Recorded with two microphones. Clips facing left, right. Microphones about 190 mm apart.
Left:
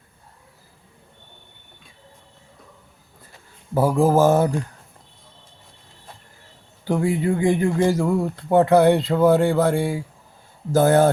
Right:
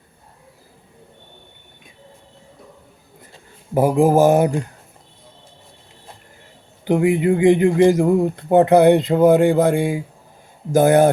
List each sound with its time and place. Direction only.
3.3 s speech: 20° right (ahead or behind)
6.8 s speech: 20° right (ahead or behind)